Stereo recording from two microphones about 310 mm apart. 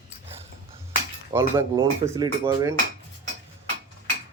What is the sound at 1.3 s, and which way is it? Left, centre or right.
Cutlery, centre.